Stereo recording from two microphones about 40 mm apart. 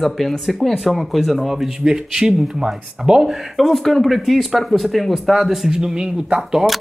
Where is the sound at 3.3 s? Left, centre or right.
Centre; by 6.4 s right.